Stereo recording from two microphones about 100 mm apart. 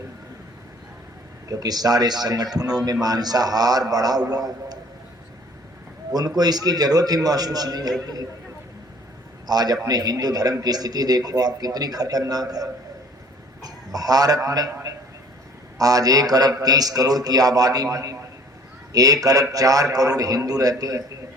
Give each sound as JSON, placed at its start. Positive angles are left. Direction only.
{"t": 1.5, "sound": "a man's voice", "side_deg": -40}
{"t": 6.1, "sound": "a man's voice", "side_deg": -40}
{"t": 9.5, "sound": "a man's voice", "side_deg": -40}
{"t": 15.8, "sound": "a man's voice", "side_deg": -40}